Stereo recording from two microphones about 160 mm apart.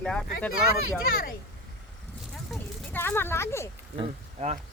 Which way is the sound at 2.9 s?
15° left (ahead or behind).